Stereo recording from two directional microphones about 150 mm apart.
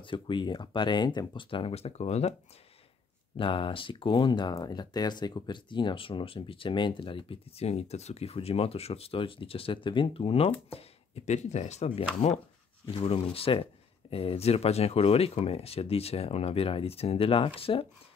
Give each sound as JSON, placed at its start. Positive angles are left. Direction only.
{"t": 0.0, "sound": "speech", "side_deg": 35}
{"t": 3.3, "sound": "speech", "side_deg": 35}